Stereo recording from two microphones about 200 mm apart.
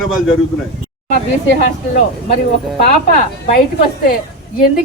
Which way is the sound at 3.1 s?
50° left (ahead or behind).